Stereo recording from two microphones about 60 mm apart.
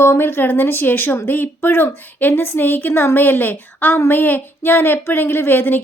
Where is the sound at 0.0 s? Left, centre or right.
Left.